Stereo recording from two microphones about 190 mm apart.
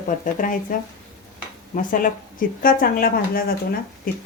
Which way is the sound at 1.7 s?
45° left (ahead or behind).